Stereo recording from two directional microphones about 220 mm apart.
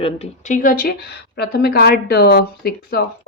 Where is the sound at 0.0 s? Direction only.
35° left (ahead or behind).